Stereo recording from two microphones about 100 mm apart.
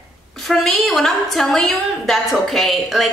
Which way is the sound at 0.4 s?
Centre (ahead or behind).